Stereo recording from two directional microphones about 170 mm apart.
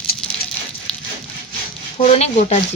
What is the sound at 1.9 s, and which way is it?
Speech, 35° left (ahead or behind).